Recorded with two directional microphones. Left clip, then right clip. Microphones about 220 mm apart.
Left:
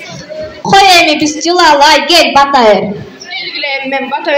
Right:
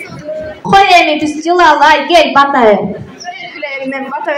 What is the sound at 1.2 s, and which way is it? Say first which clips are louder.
Speech: left 1 dB; 45° left (ahead or behind).